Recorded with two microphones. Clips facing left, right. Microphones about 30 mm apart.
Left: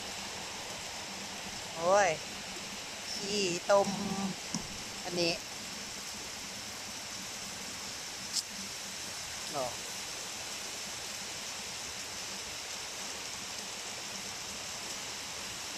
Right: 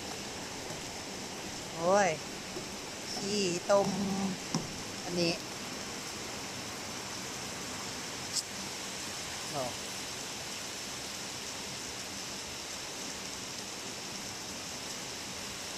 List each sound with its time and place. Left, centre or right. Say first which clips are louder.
1.8 s speech: even; centre
3.3 s speech: even; centre
5.1 s speech: even; left